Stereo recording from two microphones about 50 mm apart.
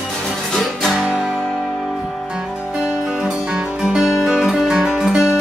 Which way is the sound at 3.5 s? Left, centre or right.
Centre.